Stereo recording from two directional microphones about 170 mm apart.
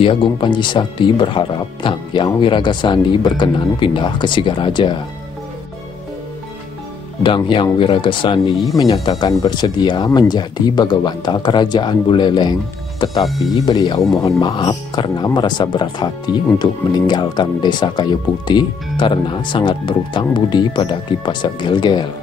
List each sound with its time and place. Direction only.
0.0 s speech: 30° left (ahead or behind)
7.2 s speech: 30° left (ahead or behind)
13.2 s speech: centre (ahead or behind)
13.7 s speech: 25° left (ahead or behind)